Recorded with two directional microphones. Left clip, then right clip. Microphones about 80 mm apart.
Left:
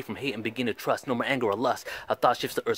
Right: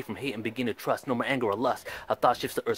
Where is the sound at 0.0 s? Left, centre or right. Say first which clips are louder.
Left 2 dB; left.